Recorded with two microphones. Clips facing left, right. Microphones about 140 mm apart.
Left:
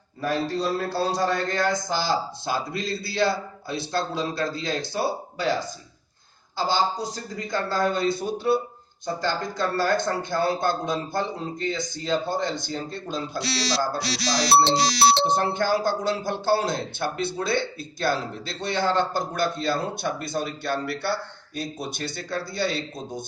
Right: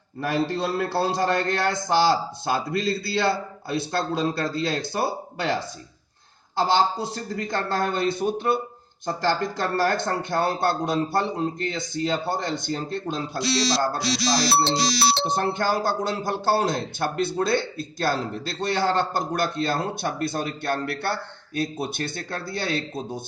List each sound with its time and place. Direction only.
0.2 s a man's voice: 70° right (ahead or behind)
14.6 s speech: 60° left (ahead or behind)
15.4 s a man's voice: 50° right (ahead or behind)